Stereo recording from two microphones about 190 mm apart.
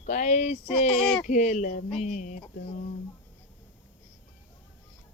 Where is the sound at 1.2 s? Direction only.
40° left (ahead or behind).